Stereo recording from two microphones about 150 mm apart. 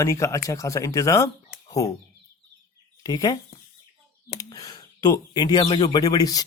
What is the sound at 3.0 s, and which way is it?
Speech, 25° left (ahead or behind).